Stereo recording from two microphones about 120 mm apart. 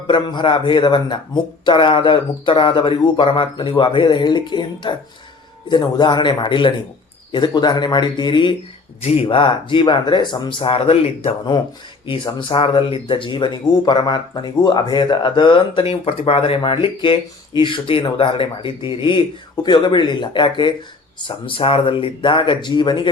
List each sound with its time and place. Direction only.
0.1 s speech: 40° left (ahead or behind)
9.0 s speech: 55° left (ahead or behind)
12.0 s speech: 45° left (ahead or behind)